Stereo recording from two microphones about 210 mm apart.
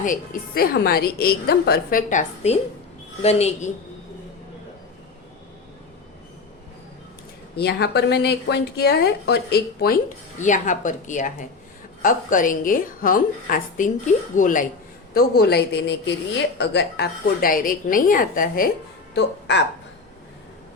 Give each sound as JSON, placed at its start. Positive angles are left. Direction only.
{"t": 0.0, "sound": "a woman's voice", "side_deg": 40}
{"t": 7.5, "sound": "a woman's voice", "side_deg": 50}
{"t": 10.4, "sound": "a woman's voice", "side_deg": 35}
{"t": 19.1, "sound": "speech", "side_deg": 55}